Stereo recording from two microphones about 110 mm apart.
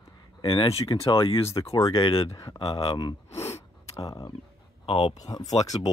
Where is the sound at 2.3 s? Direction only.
30° left (ahead or behind).